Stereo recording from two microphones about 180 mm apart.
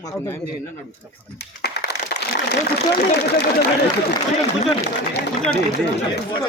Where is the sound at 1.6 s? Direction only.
65° left (ahead or behind).